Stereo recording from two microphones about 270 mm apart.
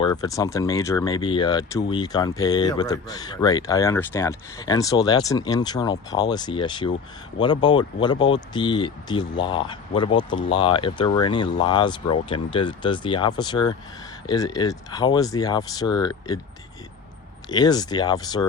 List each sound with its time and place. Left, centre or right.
0.0 s speech: centre
17.5 s speech: centre